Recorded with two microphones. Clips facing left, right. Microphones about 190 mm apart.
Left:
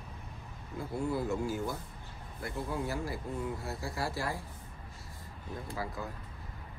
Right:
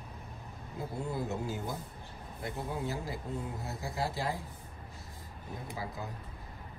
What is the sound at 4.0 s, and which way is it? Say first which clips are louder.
Speech: right 2 dB; 20° right (ahead or behind).